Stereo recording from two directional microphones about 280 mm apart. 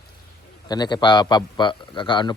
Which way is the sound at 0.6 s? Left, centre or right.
Centre.